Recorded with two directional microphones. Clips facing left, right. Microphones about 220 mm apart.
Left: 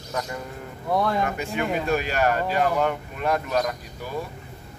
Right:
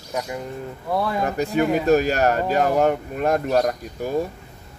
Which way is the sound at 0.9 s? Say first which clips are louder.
Even; 5° right (ahead or behind).